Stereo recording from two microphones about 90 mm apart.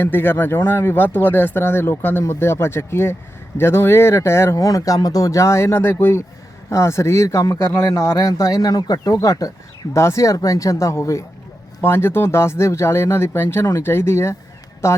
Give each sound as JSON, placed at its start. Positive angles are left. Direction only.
{"t": 0.0, "sound": "speech", "side_deg": 25}